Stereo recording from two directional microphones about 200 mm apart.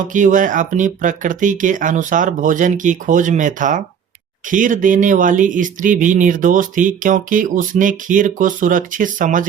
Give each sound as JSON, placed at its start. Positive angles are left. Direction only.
{"t": 0.0, "sound": "speech", "side_deg": -40}